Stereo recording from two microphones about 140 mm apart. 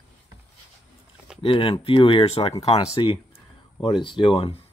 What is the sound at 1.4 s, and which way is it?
Speech, 40° left (ahead or behind).